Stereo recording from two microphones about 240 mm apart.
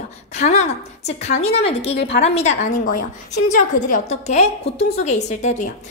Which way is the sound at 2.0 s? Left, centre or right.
Left.